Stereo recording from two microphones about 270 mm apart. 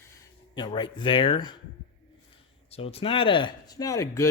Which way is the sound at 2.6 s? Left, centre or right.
Left.